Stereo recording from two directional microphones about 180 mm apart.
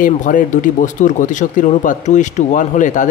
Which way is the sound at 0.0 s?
45° left (ahead or behind).